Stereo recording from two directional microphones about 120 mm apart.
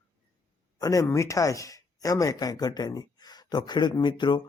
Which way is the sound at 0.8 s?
30° left (ahead or behind).